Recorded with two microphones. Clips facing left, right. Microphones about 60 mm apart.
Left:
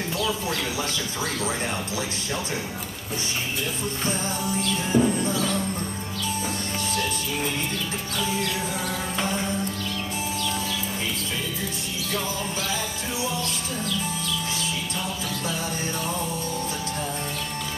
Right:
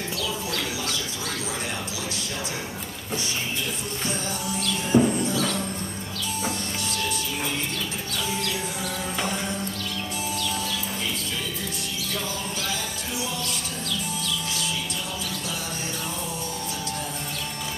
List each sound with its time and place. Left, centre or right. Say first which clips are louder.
4.9 s music: right 2 dB; right
5.3 s music: even; centre